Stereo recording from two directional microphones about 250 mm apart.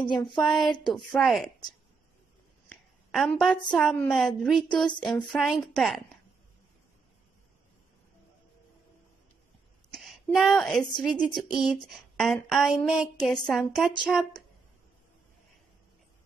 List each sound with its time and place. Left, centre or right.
0.0 s speech: centre
0.9 s a woman's voice: centre
3.1 s a woman's voice: centre
9.9 s a sound: centre
10.8 s a woman's voice: centre
11.1 s a woman's voice: centre